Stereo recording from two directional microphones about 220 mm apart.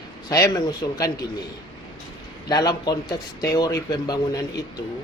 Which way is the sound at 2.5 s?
20° left (ahead or behind).